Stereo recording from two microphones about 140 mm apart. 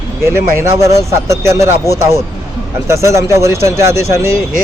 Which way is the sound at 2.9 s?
20° right (ahead or behind).